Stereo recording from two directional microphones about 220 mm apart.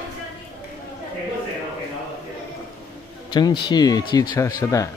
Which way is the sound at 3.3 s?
20° left (ahead or behind).